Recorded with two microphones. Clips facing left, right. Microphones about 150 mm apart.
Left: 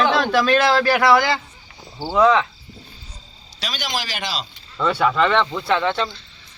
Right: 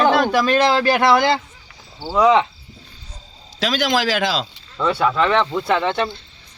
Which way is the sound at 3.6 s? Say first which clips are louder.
Right 10 dB; 90° right.